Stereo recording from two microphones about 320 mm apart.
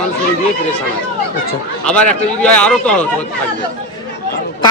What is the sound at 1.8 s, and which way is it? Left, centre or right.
A man's voice, centre.